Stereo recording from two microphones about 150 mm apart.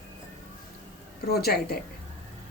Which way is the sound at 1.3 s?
90° left.